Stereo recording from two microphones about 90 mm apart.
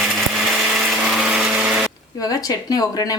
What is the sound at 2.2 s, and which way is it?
Speech, 45° left (ahead or behind).